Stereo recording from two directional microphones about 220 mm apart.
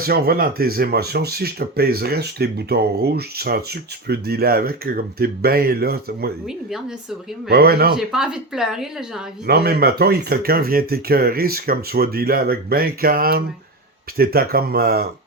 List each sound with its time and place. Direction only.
0.0 s speech: 45° right (ahead or behind)
7.5 s speech: 45° right (ahead or behind)
7.9 s speech: centre (ahead or behind)
9.5 s speech: 45° right (ahead or behind)